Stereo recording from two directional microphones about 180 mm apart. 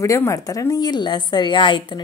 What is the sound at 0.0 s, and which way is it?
Speech, 15° left (ahead or behind).